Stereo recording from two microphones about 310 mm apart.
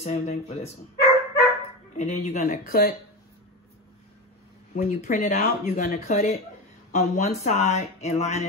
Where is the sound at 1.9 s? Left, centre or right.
Left.